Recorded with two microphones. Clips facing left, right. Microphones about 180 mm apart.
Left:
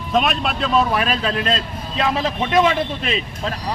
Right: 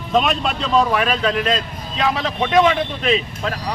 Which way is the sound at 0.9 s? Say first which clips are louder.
Right 2 dB; 35° left (ahead or behind).